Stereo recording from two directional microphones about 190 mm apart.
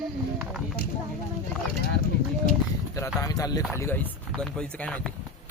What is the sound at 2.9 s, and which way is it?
Speech, 20° left (ahead or behind).